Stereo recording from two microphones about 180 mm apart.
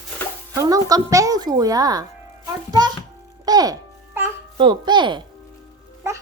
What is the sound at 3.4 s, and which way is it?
Music, 20° right (ahead or behind).